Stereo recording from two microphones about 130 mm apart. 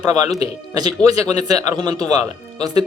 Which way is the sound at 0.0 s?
30° right (ahead or behind).